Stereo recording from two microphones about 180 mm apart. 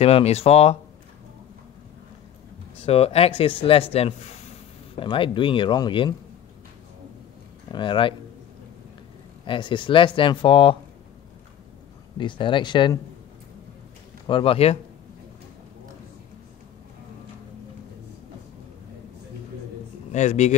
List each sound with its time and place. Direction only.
0.0 s speech: 35° left (ahead or behind)
2.8 s speech: 35° left (ahead or behind)
4.9 s speech: 30° left (ahead or behind)
7.7 s speech: 25° left (ahead or behind)
9.5 s speech: 25° left (ahead or behind)
12.2 s speech: 25° left (ahead or behind)
14.2 s speech: 30° left (ahead or behind)
20.1 s speech: 40° left (ahead or behind)